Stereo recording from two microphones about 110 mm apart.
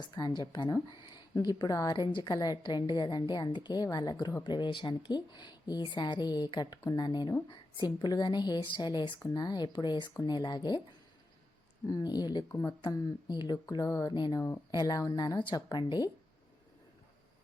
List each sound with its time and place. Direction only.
0.0 s a woman's voice: 40° left (ahead or behind)
4.4 s a woman's voice: 45° left (ahead or behind)
11.9 s a woman's voice: 35° left (ahead or behind)
12.5 s a woman's voice: 20° left (ahead or behind)
12.9 s a woman's voice: 35° left (ahead or behind)
14.1 s speech: 45° left (ahead or behind)
14.3 s a woman's voice: 25° left (ahead or behind)
14.7 s a woman's voice: 40° left (ahead or behind)
15.4 s speech: 45° left (ahead or behind)